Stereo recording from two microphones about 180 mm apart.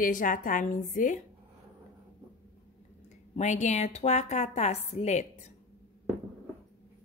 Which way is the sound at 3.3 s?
40° left (ahead or behind).